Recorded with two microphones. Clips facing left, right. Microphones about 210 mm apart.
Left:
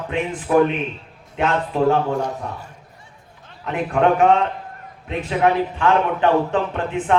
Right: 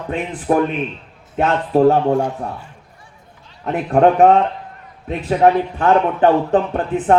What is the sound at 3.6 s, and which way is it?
Speech, 40° right (ahead or behind).